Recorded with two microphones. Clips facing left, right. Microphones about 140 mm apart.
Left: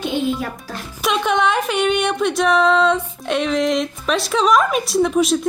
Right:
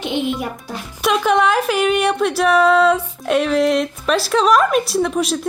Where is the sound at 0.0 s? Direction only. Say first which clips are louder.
Even; 20° right (ahead or behind).